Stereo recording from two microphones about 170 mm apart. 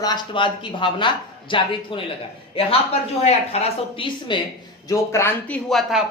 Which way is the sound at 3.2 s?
35° left (ahead or behind).